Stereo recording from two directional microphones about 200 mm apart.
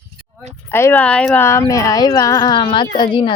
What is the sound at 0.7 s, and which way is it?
Speech, 10° left (ahead or behind).